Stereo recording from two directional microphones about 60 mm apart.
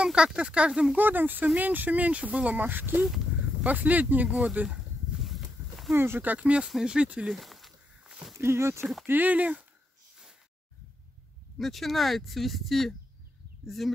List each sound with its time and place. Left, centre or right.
0.0 s speech: centre
0.9 s speech: right
4.3 s speech: centre
4.6 s a sound: centre
5.9 s speech: right
6.3 s speech: centre
7.3 s a sound: centre
8.1 s a sound: centre
8.4 s speech: right
9.0 s speech: right
11.5 s speech: centre